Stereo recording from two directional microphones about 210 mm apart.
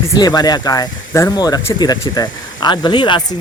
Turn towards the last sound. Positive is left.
turn(degrees=20)  # may be behind; listen again after turning